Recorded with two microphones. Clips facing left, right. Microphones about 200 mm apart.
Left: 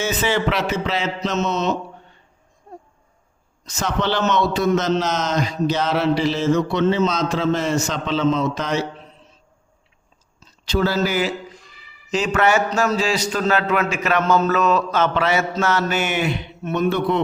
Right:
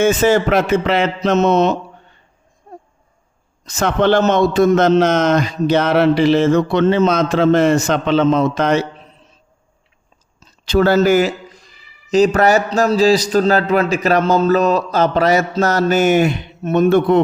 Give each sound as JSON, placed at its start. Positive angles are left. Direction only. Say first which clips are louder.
{"t": 0.0, "sound": "a man's voice", "louder": "right 8 dB", "side_deg": -45}
{"t": 3.7, "sound": "a man's voice", "louder": "right 8 dB", "side_deg": -55}
{"t": 10.7, "sound": "a man's voice", "louder": "right 8 dB", "side_deg": -60}